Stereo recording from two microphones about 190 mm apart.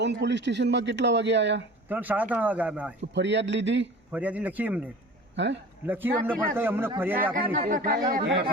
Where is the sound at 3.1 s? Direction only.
65° right (ahead or behind).